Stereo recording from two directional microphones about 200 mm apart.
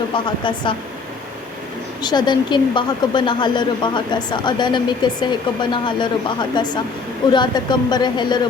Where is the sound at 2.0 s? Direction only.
20° left (ahead or behind).